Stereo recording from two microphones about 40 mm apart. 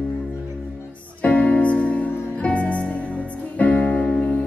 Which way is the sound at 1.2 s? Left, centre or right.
Left.